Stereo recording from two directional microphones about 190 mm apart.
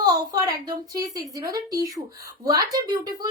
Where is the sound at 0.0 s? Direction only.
20° right (ahead or behind).